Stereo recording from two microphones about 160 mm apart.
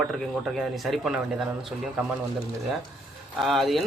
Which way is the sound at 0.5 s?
Centre (ahead or behind).